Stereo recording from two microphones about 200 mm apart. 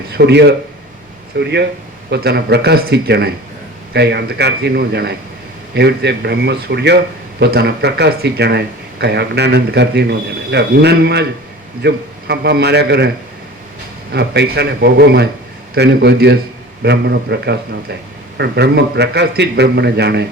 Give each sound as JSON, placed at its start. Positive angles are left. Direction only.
{"t": 0.1, "sound": "speech", "side_deg": -55}
{"t": 14.1, "sound": "a man's voice", "side_deg": -55}